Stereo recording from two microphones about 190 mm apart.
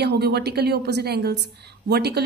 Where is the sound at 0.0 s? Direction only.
60° right (ahead or behind).